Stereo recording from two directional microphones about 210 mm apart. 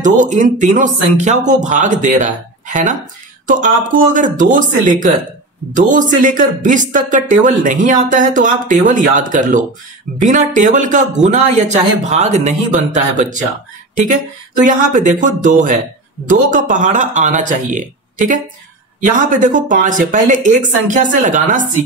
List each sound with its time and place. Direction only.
0.0 s speech: 35° right (ahead or behind)
14.6 s speech: 40° right (ahead or behind)